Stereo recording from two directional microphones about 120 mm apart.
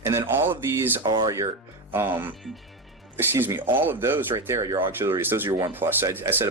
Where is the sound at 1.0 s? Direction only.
35° right (ahead or behind).